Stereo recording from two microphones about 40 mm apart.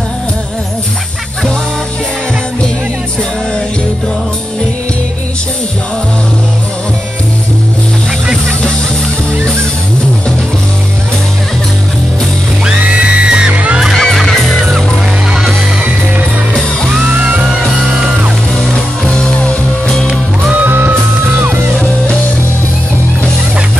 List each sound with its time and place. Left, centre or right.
12.8 s music: right
13.9 s music: centre
17.0 s music: right
17.4 s music: right
19.0 s music: left
20.6 s music: right